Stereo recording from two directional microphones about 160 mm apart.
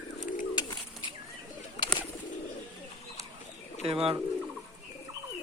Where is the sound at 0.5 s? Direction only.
30° left (ahead or behind).